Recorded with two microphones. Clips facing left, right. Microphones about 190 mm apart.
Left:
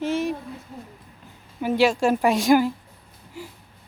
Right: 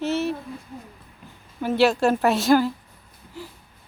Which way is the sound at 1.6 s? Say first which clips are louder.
Right 1 dB; 10° left (ahead or behind).